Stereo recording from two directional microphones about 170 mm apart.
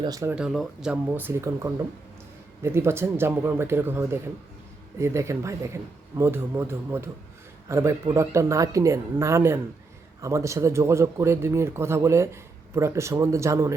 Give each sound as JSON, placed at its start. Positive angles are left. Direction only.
{"t": 0.0, "sound": "speech", "side_deg": -20}
{"t": 0.3, "sound": "speech", "side_deg": 0}